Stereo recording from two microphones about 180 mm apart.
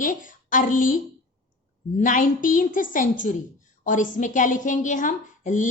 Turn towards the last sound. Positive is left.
turn(degrees=45)  # may be behind; listen again after turning